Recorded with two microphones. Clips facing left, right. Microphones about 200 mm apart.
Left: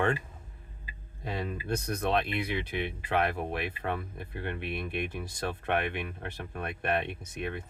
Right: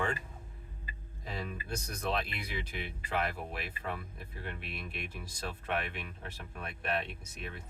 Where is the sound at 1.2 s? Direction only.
60° left (ahead or behind).